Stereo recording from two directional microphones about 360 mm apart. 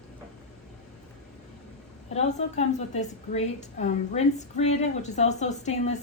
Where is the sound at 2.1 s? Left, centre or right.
Centre.